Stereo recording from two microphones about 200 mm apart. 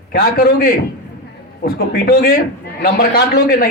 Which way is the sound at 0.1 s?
50° left (ahead or behind).